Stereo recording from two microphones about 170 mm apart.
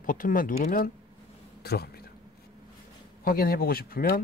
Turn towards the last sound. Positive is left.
turn(degrees=60)  # may be behind; listen again after turning